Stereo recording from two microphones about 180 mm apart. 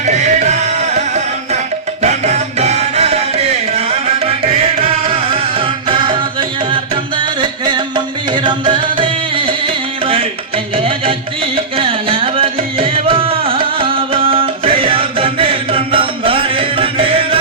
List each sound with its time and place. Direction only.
0.0 s music: 40° right (ahead or behind)
5.0 s music: 30° right (ahead or behind)
11.5 s music: 30° right (ahead or behind)